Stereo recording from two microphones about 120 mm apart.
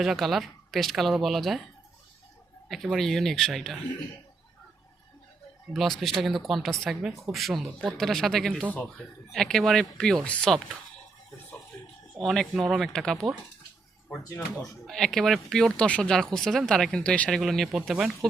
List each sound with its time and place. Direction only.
0.0 s speech: centre (ahead or behind)
2.6 s speech: centre (ahead or behind)
5.7 s speech: centre (ahead or behind)
12.2 s speech: 5° left (ahead or behind)
14.1 s speech: 25° left (ahead or behind)
14.8 s speech: centre (ahead or behind)